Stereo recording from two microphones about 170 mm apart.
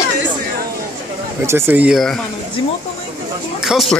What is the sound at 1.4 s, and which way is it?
Speech, 15° right (ahead or behind).